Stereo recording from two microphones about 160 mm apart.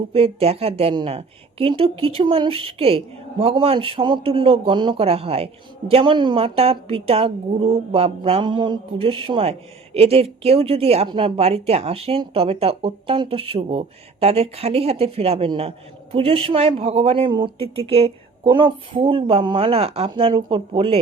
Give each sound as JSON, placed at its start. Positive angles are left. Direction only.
{"t": 0.1, "sound": "a woman's voice", "side_deg": -40}